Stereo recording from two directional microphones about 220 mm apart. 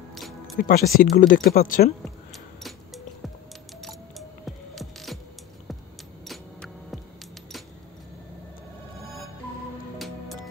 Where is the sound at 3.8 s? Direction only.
Centre (ahead or behind).